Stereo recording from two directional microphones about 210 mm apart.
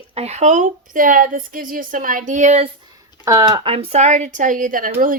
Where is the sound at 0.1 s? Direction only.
30° right (ahead or behind).